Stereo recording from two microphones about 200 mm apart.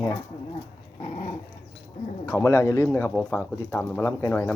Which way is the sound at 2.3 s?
15° left (ahead or behind).